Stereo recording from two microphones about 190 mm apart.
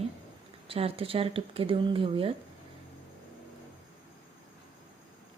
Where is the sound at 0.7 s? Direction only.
30° right (ahead or behind).